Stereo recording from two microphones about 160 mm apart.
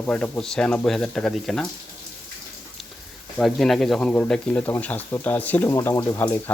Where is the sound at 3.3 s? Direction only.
Centre (ahead or behind).